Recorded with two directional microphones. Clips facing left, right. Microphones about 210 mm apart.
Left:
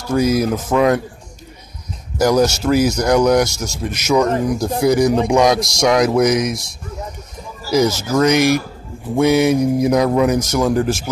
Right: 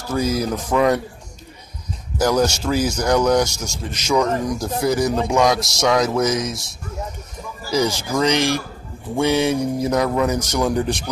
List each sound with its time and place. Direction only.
0.1 s a man's voice: 10° left (ahead or behind)
2.1 s a man's voice: 10° left (ahead or behind)
8.1 s a man's voice: 10° left (ahead or behind)